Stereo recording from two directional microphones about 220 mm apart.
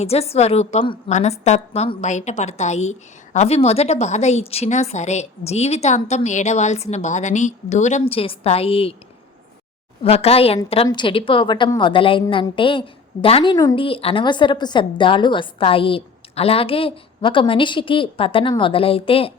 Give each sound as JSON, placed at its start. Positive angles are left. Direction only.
{"t": 0.0, "sound": "a woman's voice", "side_deg": 30}
{"t": 10.0, "sound": "a woman's voice", "side_deg": 25}